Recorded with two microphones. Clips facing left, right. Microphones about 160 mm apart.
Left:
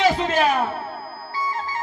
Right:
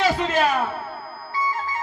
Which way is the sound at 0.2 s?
20° left (ahead or behind).